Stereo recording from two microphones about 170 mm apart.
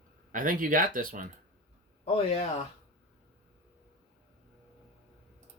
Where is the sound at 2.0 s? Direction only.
35° left (ahead or behind).